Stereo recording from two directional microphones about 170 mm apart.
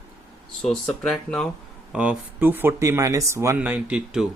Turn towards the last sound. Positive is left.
turn(degrees=-5)  # may be behind; listen again after turning